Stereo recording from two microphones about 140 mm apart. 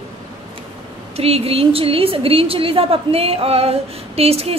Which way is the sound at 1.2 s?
45° right (ahead or behind).